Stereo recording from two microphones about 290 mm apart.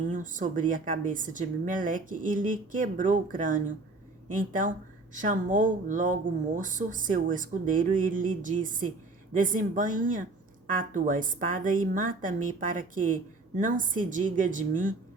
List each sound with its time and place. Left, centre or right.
0.0 s a woman's voice: right